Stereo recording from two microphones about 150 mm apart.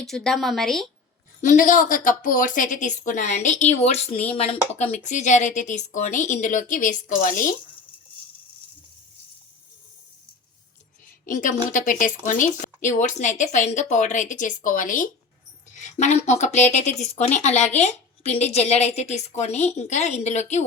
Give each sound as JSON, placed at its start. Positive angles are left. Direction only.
{"t": 0.0, "sound": "speech", "side_deg": 5}
{"t": 1.4, "sound": "speech", "side_deg": 60}
{"t": 11.3, "sound": "a woman's voice", "side_deg": 60}